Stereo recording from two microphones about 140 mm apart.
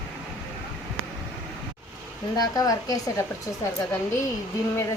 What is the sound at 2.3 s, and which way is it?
Speech, 25° left (ahead or behind).